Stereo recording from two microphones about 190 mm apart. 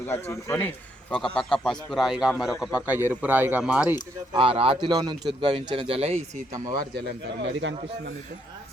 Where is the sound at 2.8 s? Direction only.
10° right (ahead or behind).